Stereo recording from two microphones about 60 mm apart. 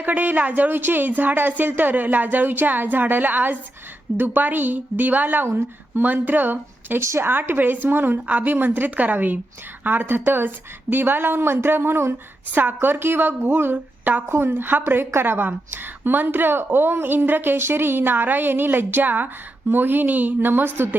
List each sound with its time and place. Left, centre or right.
0.0 s a woman's voice: right
7.0 s a woman's voice: right
7.3 s a woman's voice: right
13.7 s a woman's voice: right
14.3 s a woman's voice: right